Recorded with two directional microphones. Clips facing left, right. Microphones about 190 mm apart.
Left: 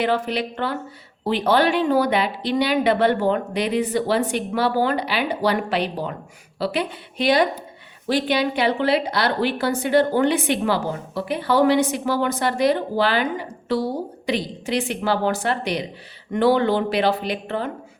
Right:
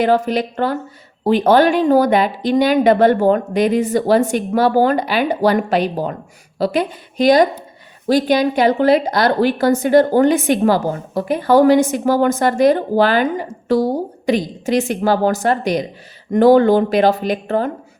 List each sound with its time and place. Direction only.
0.0 s a woman's voice: 45° right (ahead or behind)